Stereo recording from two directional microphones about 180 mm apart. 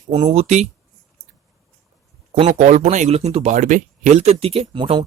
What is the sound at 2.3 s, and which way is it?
Speech, 35° right (ahead or behind).